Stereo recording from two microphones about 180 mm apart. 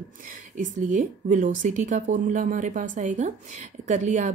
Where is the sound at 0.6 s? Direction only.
45° right (ahead or behind).